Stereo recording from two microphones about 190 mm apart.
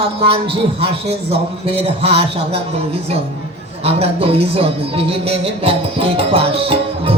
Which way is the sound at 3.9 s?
30° right (ahead or behind).